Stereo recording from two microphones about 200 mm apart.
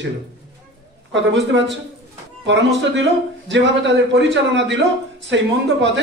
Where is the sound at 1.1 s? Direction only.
65° right (ahead or behind).